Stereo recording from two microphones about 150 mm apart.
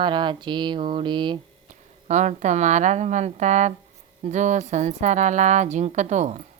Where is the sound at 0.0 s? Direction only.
30° right (ahead or behind).